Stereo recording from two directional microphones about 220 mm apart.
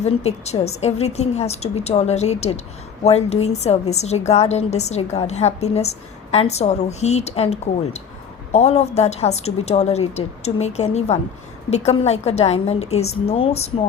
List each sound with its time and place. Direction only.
0.0 s a woman's voice: 30° left (ahead or behind)